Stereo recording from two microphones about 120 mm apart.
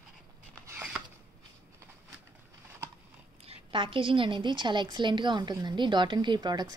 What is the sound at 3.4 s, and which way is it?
A woman's voice, 45° right (ahead or behind).